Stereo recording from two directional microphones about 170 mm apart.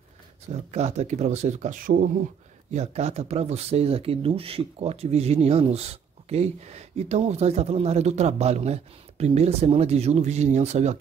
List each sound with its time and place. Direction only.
0.7 s speech: 40° right (ahead or behind); by 2.0 s 55° right (ahead or behind)
2.7 s speech: 40° right (ahead or behind)